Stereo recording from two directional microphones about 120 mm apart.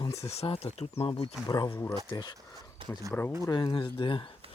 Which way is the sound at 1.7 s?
20° left (ahead or behind).